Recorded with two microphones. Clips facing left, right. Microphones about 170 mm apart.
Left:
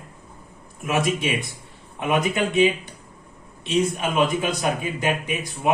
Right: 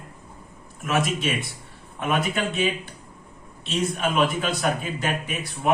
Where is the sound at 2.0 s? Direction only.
15° left (ahead or behind).